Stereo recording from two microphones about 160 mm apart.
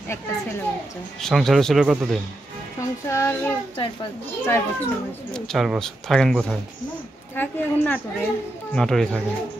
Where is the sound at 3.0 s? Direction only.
15° left (ahead or behind).